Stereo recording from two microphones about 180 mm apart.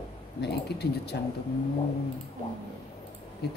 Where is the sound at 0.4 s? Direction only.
65° left (ahead or behind).